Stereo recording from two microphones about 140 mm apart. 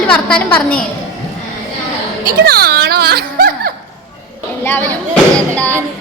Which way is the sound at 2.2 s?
90° right.